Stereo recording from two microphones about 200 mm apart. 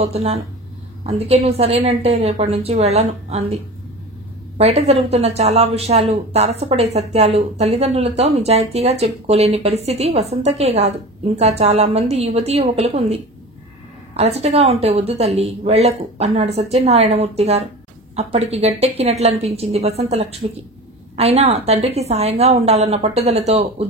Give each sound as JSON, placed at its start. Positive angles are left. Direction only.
{"t": 0.0, "sound": "speech", "side_deg": -30}
{"t": 4.6, "sound": "speech", "side_deg": -30}